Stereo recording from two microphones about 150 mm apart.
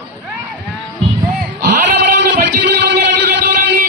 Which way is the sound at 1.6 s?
65° right (ahead or behind).